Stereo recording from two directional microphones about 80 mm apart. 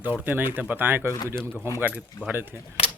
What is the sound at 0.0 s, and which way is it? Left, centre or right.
A child's voice, right.